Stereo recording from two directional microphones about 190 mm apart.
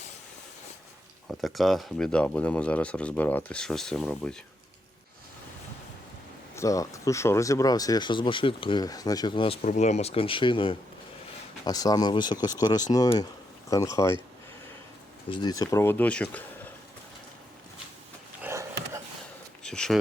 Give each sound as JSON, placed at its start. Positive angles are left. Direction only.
{"t": 1.3, "sound": "speech", "side_deg": 0}
{"t": 6.6, "sound": "speech", "side_deg": 15}
{"t": 9.6, "sound": "speech", "side_deg": 40}
{"t": 15.3, "sound": "speech", "side_deg": 20}
{"t": 18.4, "sound": "dog", "side_deg": -15}
{"t": 19.6, "sound": "speech", "side_deg": 5}